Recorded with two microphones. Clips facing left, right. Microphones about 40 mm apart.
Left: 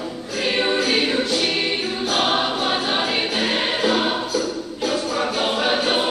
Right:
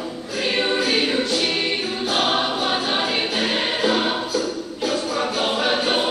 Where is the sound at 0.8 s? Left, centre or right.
Centre.